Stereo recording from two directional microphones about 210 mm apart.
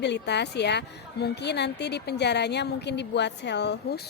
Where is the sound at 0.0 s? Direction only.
55° left (ahead or behind).